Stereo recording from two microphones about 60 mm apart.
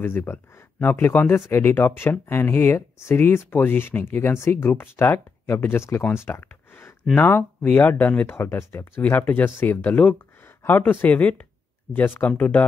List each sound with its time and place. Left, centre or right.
0.0 s speech: left
6.2 s a sound: left
7.2 s speech: left
8.4 s speech: left